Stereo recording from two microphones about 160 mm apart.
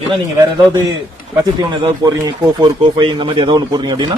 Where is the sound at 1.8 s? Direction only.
25° right (ahead or behind).